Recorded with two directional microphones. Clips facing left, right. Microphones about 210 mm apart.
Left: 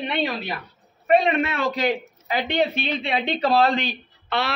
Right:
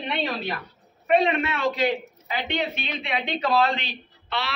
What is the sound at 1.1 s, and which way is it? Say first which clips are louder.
A woman's voice: left 2 dB; 40° left (ahead or behind).